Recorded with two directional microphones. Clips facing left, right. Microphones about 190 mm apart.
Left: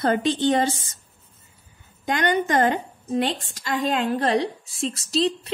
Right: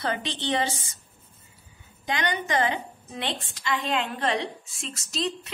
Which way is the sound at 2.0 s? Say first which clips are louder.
Left 6 dB; 50° left (ahead or behind).